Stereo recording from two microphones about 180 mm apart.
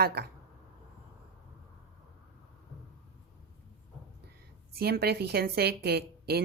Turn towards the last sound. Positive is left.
turn(degrees=-60)  # may be behind; listen again after turning